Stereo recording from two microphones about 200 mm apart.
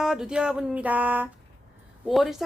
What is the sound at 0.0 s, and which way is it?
A woman's voice, 5° right (ahead or behind).